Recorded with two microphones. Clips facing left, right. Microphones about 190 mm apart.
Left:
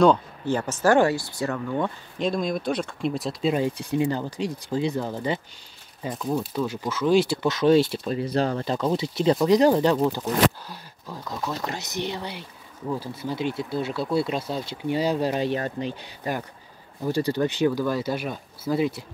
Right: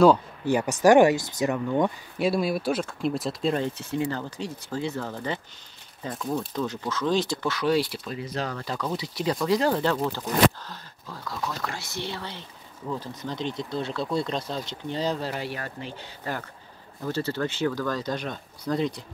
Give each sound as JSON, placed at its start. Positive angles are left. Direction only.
{"t": 0.0, "sound": "speech", "side_deg": -10}
{"t": 6.1, "sound": "speech", "side_deg": 0}